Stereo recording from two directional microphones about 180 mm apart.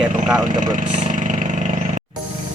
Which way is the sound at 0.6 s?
45° right (ahead or behind).